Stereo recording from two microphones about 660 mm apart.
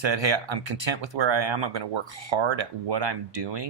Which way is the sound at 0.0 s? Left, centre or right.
Right.